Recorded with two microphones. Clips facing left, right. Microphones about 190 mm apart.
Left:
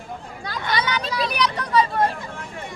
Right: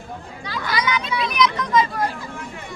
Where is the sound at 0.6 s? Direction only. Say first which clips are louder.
Right 1 dB; 25° left (ahead or behind).